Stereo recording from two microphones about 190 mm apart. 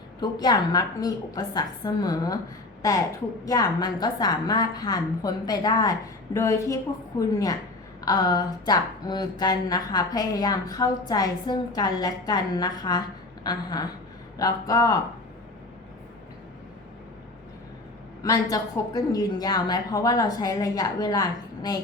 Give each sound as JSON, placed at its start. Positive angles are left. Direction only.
{"t": 0.2, "sound": "speech", "side_deg": 20}
{"t": 3.4, "sound": "a man's voice", "side_deg": 20}
{"t": 18.2, "sound": "speech", "side_deg": 20}